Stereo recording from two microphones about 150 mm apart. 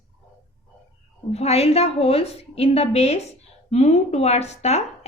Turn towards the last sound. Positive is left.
turn(degrees=45)  # may be behind; listen again after turning